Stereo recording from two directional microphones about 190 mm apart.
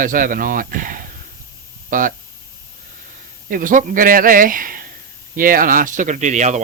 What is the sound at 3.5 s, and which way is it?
Speech, 45° right (ahead or behind).